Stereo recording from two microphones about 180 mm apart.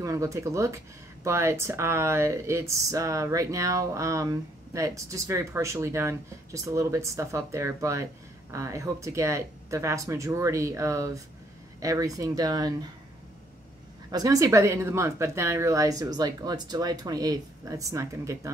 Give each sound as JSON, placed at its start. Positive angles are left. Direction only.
{"t": 0.0, "sound": "speech", "side_deg": -15}
{"t": 14.1, "sound": "speech", "side_deg": -20}